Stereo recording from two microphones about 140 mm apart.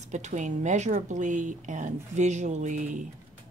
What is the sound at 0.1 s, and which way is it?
Speech, 60° right (ahead or behind).